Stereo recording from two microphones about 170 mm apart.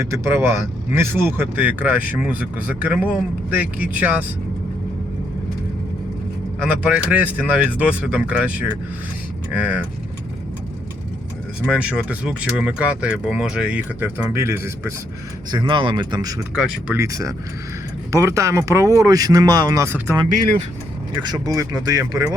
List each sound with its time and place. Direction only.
0.0 s speech: 15° right (ahead or behind)
6.6 s speech: 5° right (ahead or behind)
11.6 s speech: 5° right (ahead or behind)
15.5 s speech: 30° right (ahead or behind)
16.4 s speech: 5° right (ahead or behind)
17.0 s speech: 20° right (ahead or behind)
21.2 s speech: 25° right (ahead or behind)